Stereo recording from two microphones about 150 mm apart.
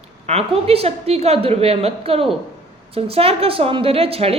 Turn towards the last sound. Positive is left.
turn(degrees=-40)  # may be behind; listen again after turning